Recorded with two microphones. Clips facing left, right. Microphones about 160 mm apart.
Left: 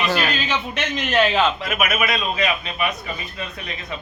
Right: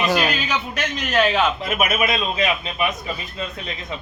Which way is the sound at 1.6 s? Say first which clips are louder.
Right 1 dB; 30° right (ahead or behind).